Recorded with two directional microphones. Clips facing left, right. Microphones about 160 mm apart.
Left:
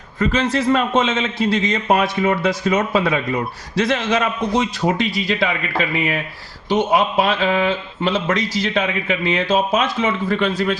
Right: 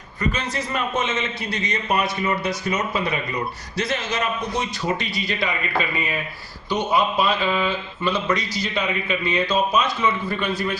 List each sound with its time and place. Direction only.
0.2 s a man's voice: 90° left
6.9 s a man's voice: 90° left